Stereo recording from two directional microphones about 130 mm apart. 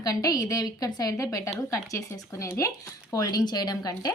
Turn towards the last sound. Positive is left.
turn(degrees=30)  # may be behind; listen again after turning